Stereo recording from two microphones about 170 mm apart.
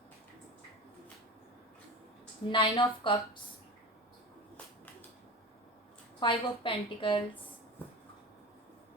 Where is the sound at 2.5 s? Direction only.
30° left (ahead or behind).